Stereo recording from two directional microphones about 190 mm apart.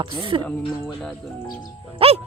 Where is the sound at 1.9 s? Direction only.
30° right (ahead or behind).